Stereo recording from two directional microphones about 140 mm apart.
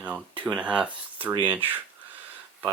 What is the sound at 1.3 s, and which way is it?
Speech, 35° right (ahead or behind).